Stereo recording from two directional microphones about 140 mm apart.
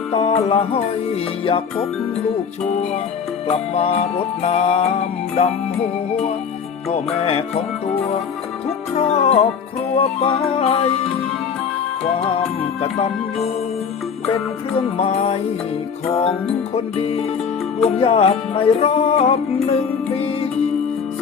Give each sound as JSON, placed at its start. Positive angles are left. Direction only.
{"t": 0.1, "sound": "music", "side_deg": 45}
{"t": 3.5, "sound": "music", "side_deg": 50}
{"t": 9.0, "sound": "music", "side_deg": 45}
{"t": 12.2, "sound": "music", "side_deg": 50}
{"t": 14.9, "sound": "music", "side_deg": 50}
{"t": 16.7, "sound": "music", "side_deg": 45}